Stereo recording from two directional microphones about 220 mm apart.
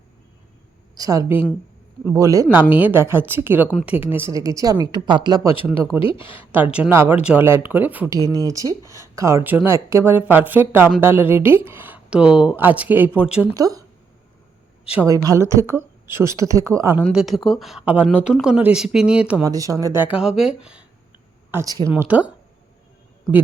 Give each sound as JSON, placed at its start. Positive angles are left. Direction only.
{"t": 0.9, "sound": "a woman's voice", "side_deg": -15}
{"t": 13.5, "sound": "a woman's voice", "side_deg": -15}
{"t": 15.0, "sound": "a woman's voice", "side_deg": -15}
{"t": 17.0, "sound": "a woman's voice", "side_deg": 0}
{"t": 20.1, "sound": "speech", "side_deg": 0}
{"t": 21.5, "sound": "a woman's voice", "side_deg": -15}